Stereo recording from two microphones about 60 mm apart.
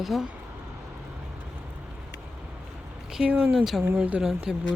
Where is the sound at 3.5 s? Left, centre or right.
Centre.